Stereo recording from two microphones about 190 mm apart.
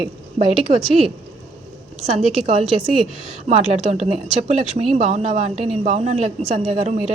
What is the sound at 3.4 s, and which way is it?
A man's voice, 30° right (ahead or behind).